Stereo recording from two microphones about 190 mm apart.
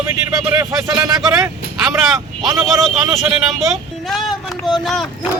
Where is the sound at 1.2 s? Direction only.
Centre (ahead or behind).